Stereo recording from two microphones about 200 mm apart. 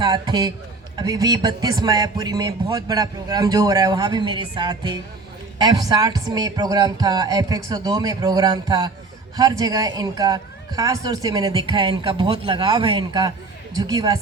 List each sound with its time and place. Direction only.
0.0 s a man's voice: 20° right (ahead or behind)